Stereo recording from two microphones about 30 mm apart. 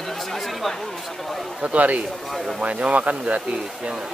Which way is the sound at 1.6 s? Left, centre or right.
Right.